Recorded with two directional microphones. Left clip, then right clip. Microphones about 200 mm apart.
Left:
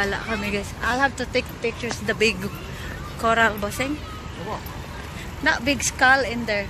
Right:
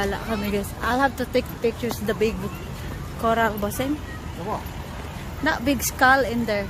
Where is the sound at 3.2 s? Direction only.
10° right (ahead or behind).